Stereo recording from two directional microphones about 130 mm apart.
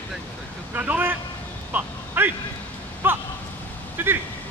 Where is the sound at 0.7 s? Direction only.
15° right (ahead or behind).